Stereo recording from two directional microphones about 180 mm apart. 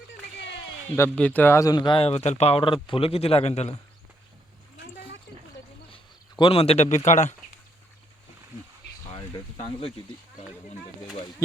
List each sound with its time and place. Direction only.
0.9 s speech: 10° left (ahead or behind); by 3.8 s 35° left (ahead or behind)
5.9 s a sound: 30° left (ahead or behind)
6.9 s speech: 40° left (ahead or behind)
9.1 s speech: 35° left (ahead or behind)